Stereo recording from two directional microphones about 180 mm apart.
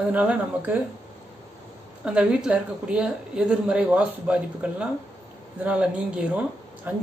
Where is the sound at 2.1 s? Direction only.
5° right (ahead or behind).